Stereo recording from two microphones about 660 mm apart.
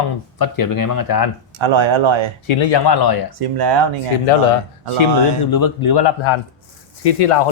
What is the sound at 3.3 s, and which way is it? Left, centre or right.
Speech, right.